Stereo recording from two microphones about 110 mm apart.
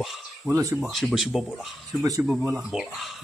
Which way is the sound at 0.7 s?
5° right (ahead or behind).